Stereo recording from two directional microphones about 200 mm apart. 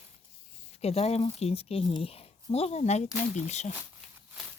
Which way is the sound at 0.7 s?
30° left (ahead or behind).